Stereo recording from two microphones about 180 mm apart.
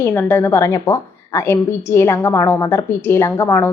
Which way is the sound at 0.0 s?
10° left (ahead or behind).